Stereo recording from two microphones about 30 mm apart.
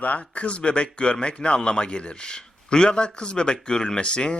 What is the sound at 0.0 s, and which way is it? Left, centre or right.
A man's voice, left.